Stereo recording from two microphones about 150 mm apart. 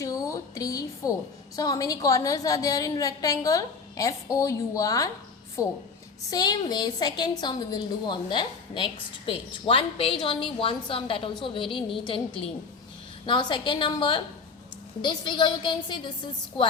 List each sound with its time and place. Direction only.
0.0 s a sound: 20° left (ahead or behind)
1.5 s a woman's voice: 25° left (ahead or behind)
13.2 s a woman's voice: 30° left (ahead or behind)